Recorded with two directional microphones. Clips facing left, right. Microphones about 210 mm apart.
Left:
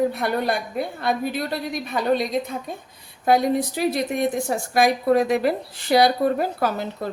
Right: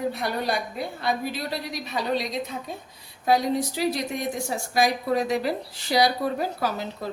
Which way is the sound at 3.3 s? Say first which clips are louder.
Left 3 dB; 55° left (ahead or behind).